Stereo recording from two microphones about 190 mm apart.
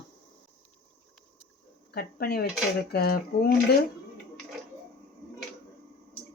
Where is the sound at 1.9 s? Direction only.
55° left (ahead or behind).